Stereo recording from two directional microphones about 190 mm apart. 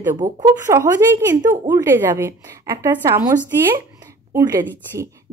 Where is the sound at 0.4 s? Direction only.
20° right (ahead or behind).